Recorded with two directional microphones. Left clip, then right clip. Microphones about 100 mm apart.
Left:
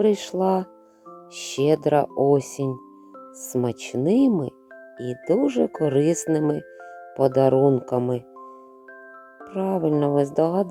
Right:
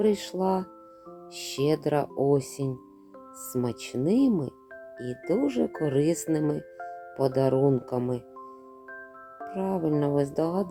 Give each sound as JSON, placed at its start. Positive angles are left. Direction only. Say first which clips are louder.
{"t": 0.0, "sound": "speech", "louder": "left 5 dB", "side_deg": 30}
{"t": 9.4, "sound": "speech", "louder": "left 5 dB", "side_deg": 30}